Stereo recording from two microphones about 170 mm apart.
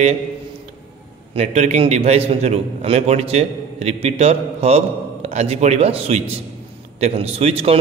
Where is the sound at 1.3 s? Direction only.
40° right (ahead or behind).